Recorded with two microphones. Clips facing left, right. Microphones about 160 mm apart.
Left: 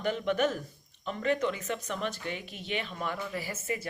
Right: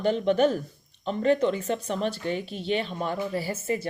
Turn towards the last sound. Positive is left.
turn(degrees=-30)  # may be behind; listen again after turning